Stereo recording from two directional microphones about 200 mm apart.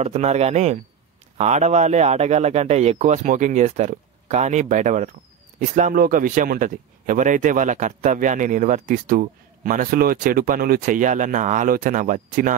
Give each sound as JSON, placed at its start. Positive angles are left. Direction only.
{"t": 0.0, "sound": "speech", "side_deg": -35}